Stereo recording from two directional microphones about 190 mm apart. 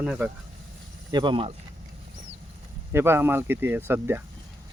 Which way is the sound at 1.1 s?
25° right (ahead or behind).